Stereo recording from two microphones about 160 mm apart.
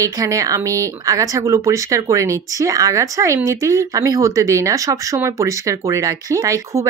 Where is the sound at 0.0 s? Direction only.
20° right (ahead or behind).